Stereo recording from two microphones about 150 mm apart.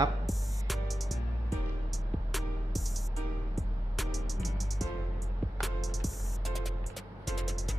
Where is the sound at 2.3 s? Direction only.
Centre (ahead or behind).